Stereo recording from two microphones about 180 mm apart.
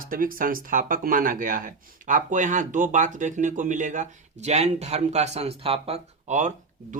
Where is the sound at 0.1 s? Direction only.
50° right (ahead or behind).